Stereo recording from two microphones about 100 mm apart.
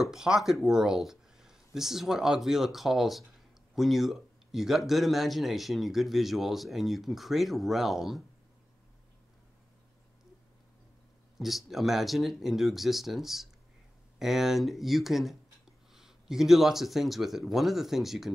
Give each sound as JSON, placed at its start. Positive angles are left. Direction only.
{"t": 0.0, "sound": "a man's voice", "side_deg": -5}
{"t": 11.3, "sound": "a man's voice", "side_deg": 0}